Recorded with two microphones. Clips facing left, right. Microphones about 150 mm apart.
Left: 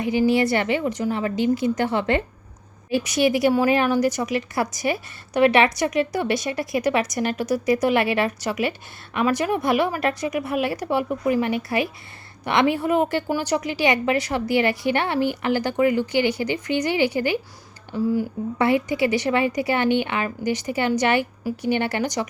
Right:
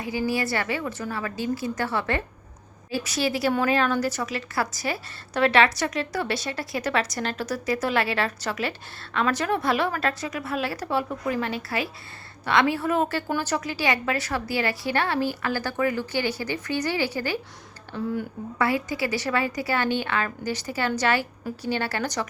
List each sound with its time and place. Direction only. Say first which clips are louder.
0.0 s a woman's voice: left 7 dB; 20° left (ahead or behind)
17.9 s speech: left 6 dB; 5° left (ahead or behind)
18.5 s a woman's voice: left 4 dB; 20° left (ahead or behind)